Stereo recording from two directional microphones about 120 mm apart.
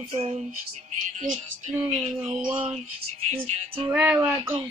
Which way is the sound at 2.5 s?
50° right (ahead or behind).